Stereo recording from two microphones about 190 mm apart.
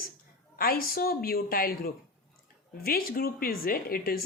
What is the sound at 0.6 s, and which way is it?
A woman's voice, 50° left (ahead or behind).